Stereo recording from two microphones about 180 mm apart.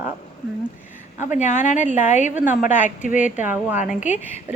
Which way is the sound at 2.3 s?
10° right (ahead or behind).